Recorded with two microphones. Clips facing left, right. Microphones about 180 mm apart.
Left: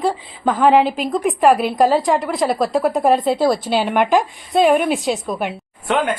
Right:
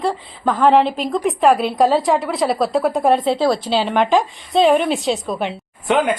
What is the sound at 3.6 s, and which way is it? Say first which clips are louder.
Speech: even; 15° left (ahead or behind).